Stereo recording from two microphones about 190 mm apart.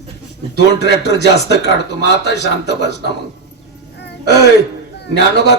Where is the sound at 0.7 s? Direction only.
60° left (ahead or behind).